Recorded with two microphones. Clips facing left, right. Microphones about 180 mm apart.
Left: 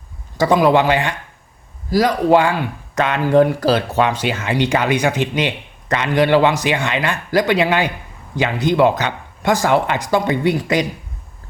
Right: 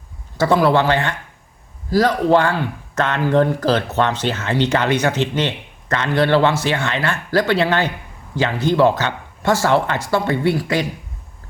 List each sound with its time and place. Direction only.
0.3 s speech: 15° left (ahead or behind)